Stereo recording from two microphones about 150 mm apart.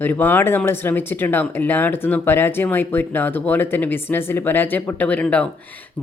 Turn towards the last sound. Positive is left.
turn(degrees=10)  # may be behind; listen again after turning